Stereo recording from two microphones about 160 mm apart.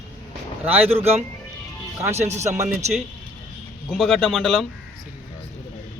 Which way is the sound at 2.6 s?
45° right (ahead or behind).